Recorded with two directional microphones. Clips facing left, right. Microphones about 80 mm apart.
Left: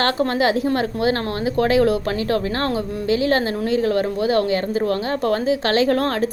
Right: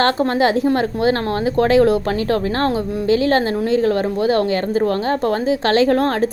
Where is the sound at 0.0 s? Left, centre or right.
Right.